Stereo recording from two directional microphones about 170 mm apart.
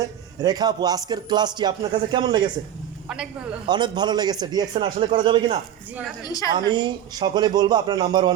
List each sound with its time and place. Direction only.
0.0 s speech: 20° right (ahead or behind)
3.7 s speech: 25° right (ahead or behind)
6.2 s a woman's voice: 20° left (ahead or behind)
6.5 s speech: 25° right (ahead or behind)